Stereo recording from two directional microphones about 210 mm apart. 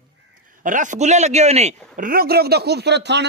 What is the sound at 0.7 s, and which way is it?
A woman's voice, 35° right (ahead or behind).